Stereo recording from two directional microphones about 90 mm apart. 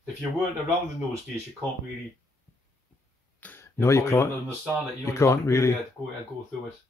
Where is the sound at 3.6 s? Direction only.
30° left (ahead or behind).